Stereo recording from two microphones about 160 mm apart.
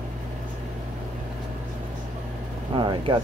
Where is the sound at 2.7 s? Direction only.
30° right (ahead or behind).